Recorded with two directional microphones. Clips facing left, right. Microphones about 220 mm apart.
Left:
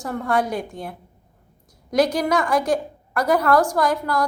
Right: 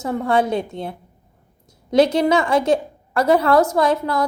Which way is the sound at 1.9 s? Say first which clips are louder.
Right 4 dB; 25° right (ahead or behind).